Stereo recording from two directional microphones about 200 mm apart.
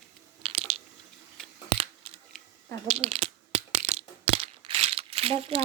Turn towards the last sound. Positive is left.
turn(degrees=-30)  # may be behind; listen again after turning